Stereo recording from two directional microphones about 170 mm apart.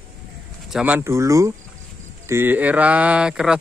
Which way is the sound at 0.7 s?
5° right (ahead or behind).